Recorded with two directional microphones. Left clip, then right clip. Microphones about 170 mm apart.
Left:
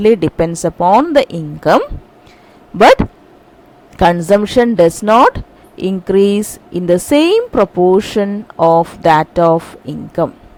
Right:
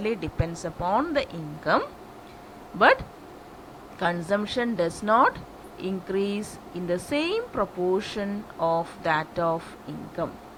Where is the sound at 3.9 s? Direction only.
65° left (ahead or behind).